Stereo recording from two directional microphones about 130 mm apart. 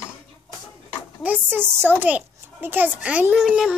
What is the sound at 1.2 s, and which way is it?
A child's voice, 15° right (ahead or behind).